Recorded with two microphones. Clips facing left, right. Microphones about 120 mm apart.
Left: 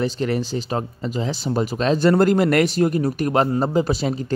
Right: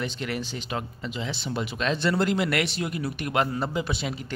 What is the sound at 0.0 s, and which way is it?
Speech, 35° left (ahead or behind).